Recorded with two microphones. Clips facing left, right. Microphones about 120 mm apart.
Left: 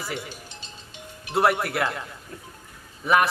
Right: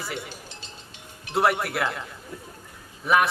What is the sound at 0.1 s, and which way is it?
Speech, centre (ahead or behind).